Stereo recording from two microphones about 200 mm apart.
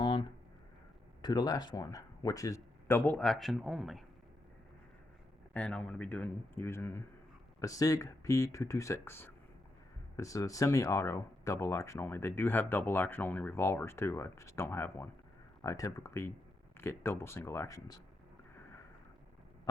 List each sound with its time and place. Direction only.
0.0 s a sound: 25° left (ahead or behind)
1.2 s speech: 20° left (ahead or behind); by 4.0 s centre (ahead or behind)
5.5 s speech: 5° left (ahead or behind)